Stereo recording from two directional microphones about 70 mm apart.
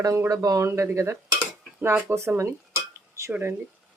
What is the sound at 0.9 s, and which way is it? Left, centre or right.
Cutlery, right.